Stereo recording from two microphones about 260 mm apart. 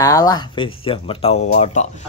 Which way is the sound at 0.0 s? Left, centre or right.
Centre.